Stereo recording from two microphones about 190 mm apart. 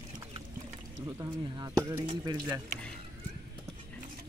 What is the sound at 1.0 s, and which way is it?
Speech, 20° right (ahead or behind).